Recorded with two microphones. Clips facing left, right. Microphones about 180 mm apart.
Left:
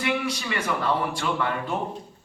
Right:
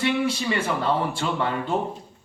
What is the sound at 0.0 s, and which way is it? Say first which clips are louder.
A man's voice: right 4 dB; 30° right (ahead or behind).